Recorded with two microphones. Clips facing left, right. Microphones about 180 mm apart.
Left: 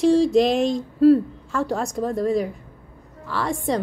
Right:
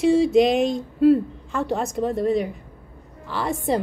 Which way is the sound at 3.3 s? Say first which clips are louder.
Even; centre (ahead or behind).